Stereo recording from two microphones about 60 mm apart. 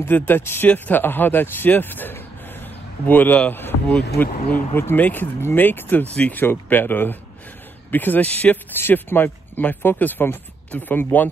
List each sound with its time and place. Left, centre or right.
0.1 s speech: left
0.4 s speech: left
0.7 s speech: left
6.1 s speech: left
6.4 s speech: left
8.7 s speech: left